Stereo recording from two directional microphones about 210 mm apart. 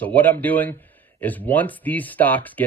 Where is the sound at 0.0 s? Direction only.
10° left (ahead or behind).